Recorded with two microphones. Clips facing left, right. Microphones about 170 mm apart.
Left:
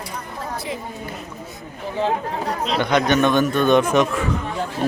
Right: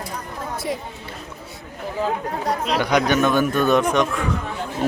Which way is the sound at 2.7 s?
10° right (ahead or behind).